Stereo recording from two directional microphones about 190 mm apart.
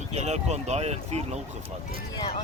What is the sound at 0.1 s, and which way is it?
Speech, 35° right (ahead or behind).